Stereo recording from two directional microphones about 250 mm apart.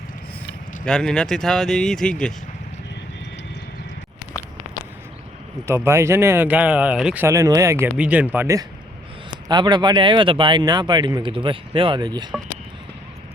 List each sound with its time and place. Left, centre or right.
0.9 s speech: centre
5.6 s speech: centre